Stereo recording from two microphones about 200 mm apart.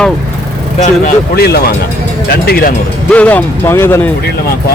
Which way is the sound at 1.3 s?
50° left (ahead or behind).